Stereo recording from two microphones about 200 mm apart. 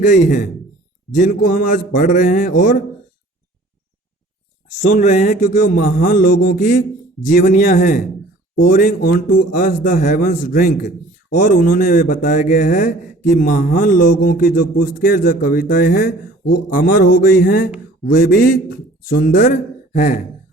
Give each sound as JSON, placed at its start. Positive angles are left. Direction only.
{"t": 0.0, "sound": "speech", "side_deg": 40}
{"t": 4.8, "sound": "speech", "side_deg": 40}
{"t": 5.7, "sound": "speech", "side_deg": 45}